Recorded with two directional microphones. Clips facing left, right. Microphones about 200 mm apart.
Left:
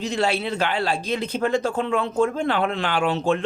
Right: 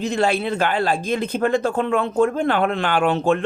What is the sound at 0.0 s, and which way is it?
Speech, 50° right (ahead or behind).